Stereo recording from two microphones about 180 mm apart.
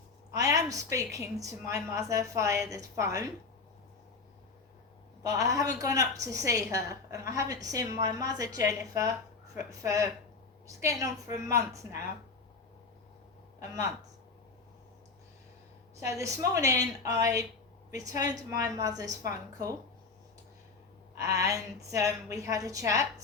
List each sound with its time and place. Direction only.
0.3 s a woman's voice: 20° right (ahead or behind)
5.2 s a woman's voice: 20° right (ahead or behind)
13.6 s a woman's voice: 20° right (ahead or behind)
16.0 s a woman's voice: 15° right (ahead or behind)
21.3 s a woman's voice: 20° right (ahead or behind)